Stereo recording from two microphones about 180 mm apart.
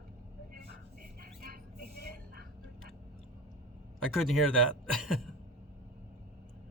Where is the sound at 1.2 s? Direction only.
55° right (ahead or behind).